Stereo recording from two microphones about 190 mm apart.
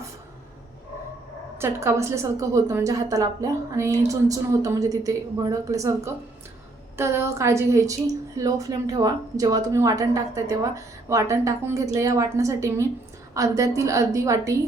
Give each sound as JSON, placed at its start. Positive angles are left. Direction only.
{"t": 1.5, "sound": "a woman's voice", "side_deg": -15}